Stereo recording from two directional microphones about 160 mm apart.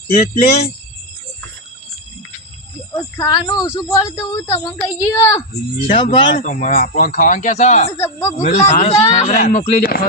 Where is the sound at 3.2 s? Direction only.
25° left (ahead or behind).